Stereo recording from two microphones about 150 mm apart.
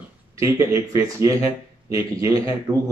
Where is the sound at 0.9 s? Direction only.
20° right (ahead or behind).